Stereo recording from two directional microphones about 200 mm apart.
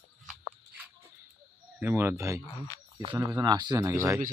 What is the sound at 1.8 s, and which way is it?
Speech, 10° right (ahead or behind).